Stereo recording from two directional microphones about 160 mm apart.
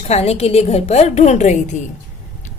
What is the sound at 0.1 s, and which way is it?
A woman's voice, 40° left (ahead or behind).